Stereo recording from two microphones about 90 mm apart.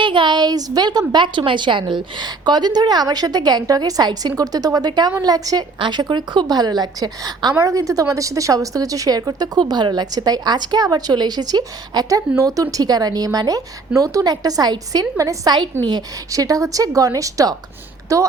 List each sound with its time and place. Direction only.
0.0 s a woman's voice: 65° right (ahead or behind); by 5.6 s 45° right (ahead or behind)
5.8 s a woman's voice: 60° right (ahead or behind)
7.6 s a woman's voice: 35° right (ahead or behind)